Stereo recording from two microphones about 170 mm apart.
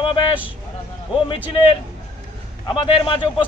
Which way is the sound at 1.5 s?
30° left (ahead or behind).